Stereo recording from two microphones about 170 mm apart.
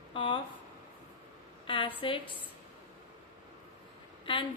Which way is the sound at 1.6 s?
30° left (ahead or behind).